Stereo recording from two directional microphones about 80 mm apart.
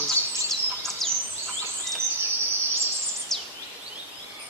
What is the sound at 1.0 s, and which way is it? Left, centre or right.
Bird vocalization, centre.